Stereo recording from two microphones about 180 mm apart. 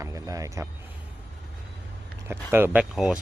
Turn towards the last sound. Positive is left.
turn(degrees=-5)  # may be behind; listen again after turning